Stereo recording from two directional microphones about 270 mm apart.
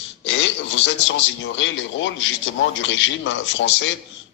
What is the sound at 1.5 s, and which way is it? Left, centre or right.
Speech, left.